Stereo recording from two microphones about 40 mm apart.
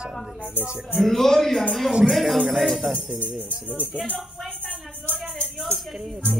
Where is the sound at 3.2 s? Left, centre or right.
Left.